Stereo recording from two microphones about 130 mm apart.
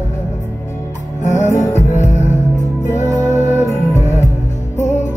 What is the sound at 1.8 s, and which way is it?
Music, 65° left (ahead or behind).